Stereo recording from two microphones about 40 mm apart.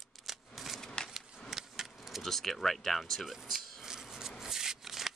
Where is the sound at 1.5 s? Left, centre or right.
Centre.